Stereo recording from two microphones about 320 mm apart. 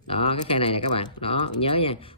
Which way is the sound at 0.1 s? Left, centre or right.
Centre.